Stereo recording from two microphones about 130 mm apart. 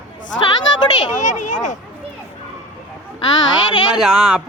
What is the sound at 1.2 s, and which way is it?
Speech, 70° left (ahead or behind).